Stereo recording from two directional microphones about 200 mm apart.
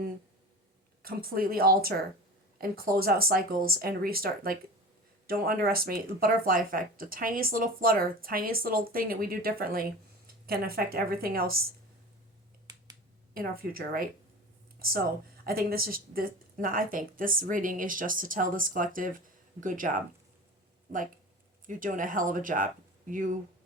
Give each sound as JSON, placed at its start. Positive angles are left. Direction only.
{"t": 1.0, "sound": "speech", "side_deg": -50}
{"t": 12.7, "sound": "finger snapping", "side_deg": -20}
{"t": 13.3, "sound": "speech", "side_deg": -45}
{"t": 15.4, "sound": "speech", "side_deg": -45}
{"t": 21.7, "sound": "speech", "side_deg": -40}